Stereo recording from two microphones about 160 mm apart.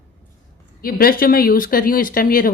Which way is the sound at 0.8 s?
70° left (ahead or behind).